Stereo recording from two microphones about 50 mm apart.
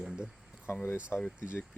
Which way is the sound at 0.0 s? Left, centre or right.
Centre.